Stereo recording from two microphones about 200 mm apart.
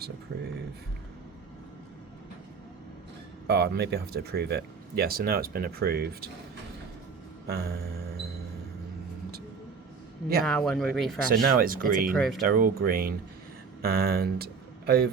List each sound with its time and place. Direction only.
3.4 s speech: 55° right (ahead or behind)
7.4 s music: 55° right (ahead or behind)
10.4 s speech: centre (ahead or behind)
11.3 s speech: 45° right (ahead or behind)
12.1 s speech: centre (ahead or behind)
12.5 s speech: 45° right (ahead or behind)